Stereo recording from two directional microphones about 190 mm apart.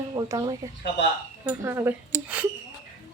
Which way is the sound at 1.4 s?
10° right (ahead or behind).